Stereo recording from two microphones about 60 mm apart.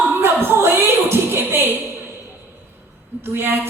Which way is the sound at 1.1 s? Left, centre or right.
Right.